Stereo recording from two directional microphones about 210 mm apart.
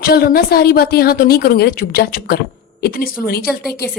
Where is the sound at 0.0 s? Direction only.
45° left (ahead or behind).